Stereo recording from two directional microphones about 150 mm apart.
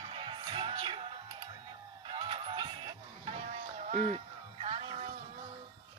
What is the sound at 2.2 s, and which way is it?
Music, 35° right (ahead or behind).